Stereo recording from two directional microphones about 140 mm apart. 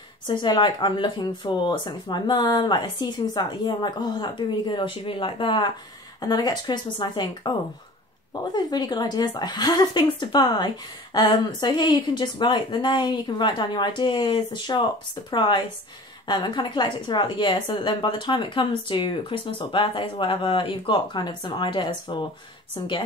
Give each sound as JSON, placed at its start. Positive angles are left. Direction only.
{"t": 0.3, "sound": "a woman's voice", "side_deg": 35}
{"t": 8.5, "sound": "a woman's voice", "side_deg": 30}